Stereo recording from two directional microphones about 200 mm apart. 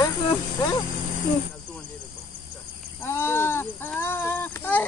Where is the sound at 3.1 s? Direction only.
10° left (ahead or behind).